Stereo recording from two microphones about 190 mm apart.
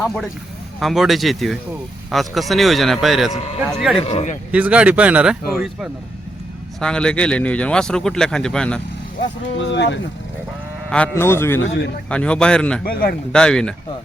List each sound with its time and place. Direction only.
0.0 s speech: centre (ahead or behind)
3.3 s a man's voice: 30° left (ahead or behind)
3.7 s speech: centre (ahead or behind)
4.0 s a man's voice: 35° left (ahead or behind)
4.5 s a man's voice: 5° right (ahead or behind)
9.6 s speech: 65° left (ahead or behind)
10.8 s speech: 5° left (ahead or behind)
12.8 s a man's voice: 55° left (ahead or behind)
13.3 s speech: 5° left (ahead or behind)